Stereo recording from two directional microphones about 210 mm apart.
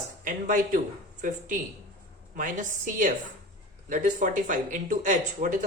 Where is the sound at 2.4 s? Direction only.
40° right (ahead or behind).